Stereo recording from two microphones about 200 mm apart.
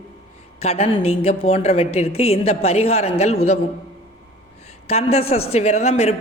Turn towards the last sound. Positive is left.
turn(degrees=30)  # may be behind; listen again after turning